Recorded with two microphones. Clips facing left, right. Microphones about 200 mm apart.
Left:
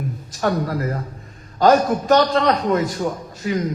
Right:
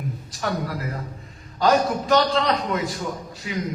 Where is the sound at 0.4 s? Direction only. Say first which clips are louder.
Left 6 dB; 45° left (ahead or behind).